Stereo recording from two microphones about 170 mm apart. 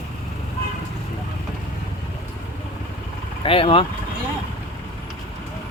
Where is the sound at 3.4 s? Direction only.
35° left (ahead or behind).